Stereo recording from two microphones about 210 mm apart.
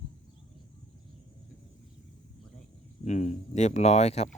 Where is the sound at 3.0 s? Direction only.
35° left (ahead or behind).